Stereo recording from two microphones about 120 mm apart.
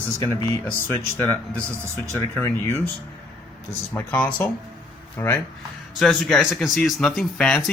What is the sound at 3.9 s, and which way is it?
Speech, 15° left (ahead or behind).